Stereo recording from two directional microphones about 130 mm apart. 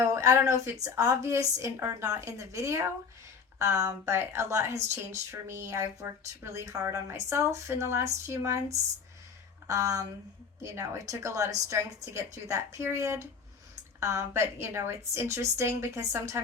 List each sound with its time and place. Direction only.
0.1 s a woman's voice: 20° right (ahead or behind)
9.6 s speech: 25° right (ahead or behind)